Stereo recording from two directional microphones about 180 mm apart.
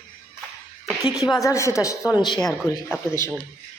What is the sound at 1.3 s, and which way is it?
A woman's voice, 15° left (ahead or behind).